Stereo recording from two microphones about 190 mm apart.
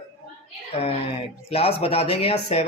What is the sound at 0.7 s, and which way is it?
Speech, 30° left (ahead or behind).